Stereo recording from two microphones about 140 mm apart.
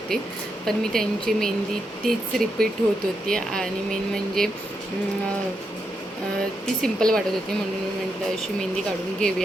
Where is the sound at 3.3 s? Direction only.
5° left (ahead or behind).